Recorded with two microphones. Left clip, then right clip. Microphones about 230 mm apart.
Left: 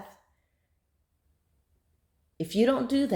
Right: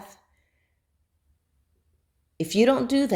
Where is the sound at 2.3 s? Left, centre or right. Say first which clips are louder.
Right 4 dB; right.